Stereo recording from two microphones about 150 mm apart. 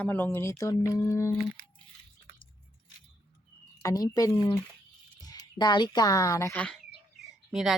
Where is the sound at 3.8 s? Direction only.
25° left (ahead or behind).